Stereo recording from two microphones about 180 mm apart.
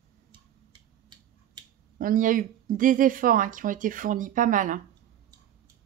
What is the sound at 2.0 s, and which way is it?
Speech, 50° right (ahead or behind).